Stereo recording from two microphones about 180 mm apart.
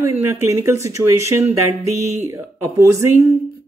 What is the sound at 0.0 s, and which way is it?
Speech, 15° right (ahead or behind).